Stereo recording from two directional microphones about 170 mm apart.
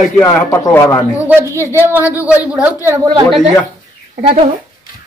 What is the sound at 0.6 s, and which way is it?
Speech, 20° left (ahead or behind).